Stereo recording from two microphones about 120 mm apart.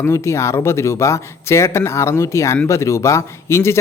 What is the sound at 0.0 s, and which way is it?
Speech, 25° left (ahead or behind).